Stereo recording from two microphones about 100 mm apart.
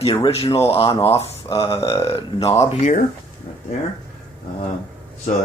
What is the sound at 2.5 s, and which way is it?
Speech, 90° left.